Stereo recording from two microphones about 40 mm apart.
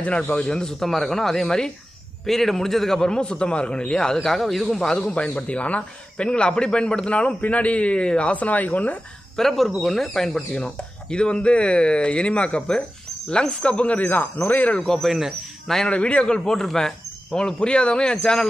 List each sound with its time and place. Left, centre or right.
0.4 s a man's voice: centre
4.7 s a man's voice: centre
5.1 s a man's voice: left
8.4 s speech: left
9.4 s a man's voice: centre
10.5 s a man's voice: left
14.0 s speech: left
14.9 s speech: centre
15.9 s a man's voice: left
16.3 s a man's voice: centre
17.3 s a man's voice: left